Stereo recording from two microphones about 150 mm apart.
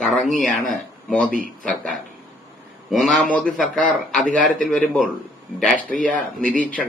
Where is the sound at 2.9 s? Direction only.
Centre (ahead or behind).